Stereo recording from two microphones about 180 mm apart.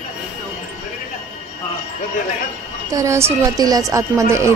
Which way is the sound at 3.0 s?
15° right (ahead or behind).